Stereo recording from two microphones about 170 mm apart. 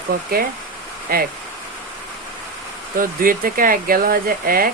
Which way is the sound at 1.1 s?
60° right (ahead or behind).